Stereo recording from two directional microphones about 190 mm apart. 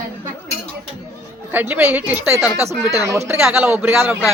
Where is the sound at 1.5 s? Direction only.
10° right (ahead or behind).